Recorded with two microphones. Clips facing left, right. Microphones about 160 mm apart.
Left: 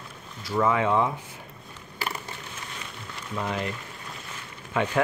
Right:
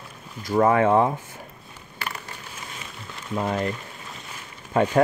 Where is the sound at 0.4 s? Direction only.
45° right (ahead or behind).